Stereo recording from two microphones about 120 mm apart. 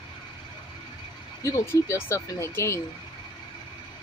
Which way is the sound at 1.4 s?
25° left (ahead or behind).